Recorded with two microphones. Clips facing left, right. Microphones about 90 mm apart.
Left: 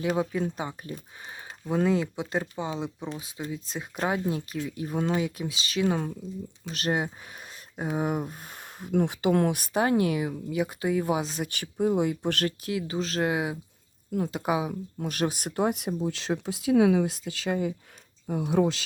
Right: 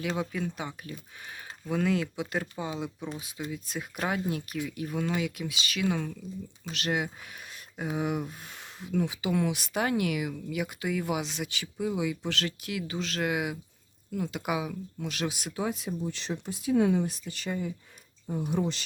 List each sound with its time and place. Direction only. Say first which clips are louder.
0.2 s speech: left 4 dB; 30° left (ahead or behind)
1.2 s speech: left 2 dB; 25° left (ahead or behind); by 9.8 s 40° left (ahead or behind)
9.8 s speech: left 4 dB; 30° left (ahead or behind); by 12.5 s 50° left (ahead or behind)
12.6 s speech: left 4 dB; 35° left (ahead or behind)
14.9 s speech: left 5 dB; 45° left (ahead or behind); by 15.9 s 60° left (ahead or behind)
16.0 s speech: left 5 dB; 90° left